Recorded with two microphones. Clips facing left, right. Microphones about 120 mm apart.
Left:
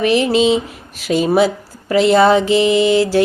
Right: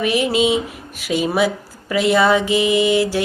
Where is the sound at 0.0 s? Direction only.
30° left (ahead or behind).